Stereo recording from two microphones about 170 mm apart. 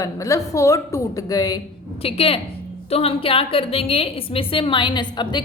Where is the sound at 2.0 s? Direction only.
35° left (ahead or behind).